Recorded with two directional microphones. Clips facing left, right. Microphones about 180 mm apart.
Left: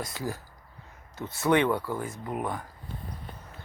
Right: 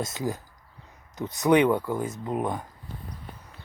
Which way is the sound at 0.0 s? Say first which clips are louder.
Right 4 dB; 20° right (ahead or behind).